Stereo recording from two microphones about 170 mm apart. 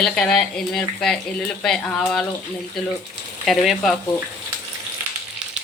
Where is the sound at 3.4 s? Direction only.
Centre (ahead or behind).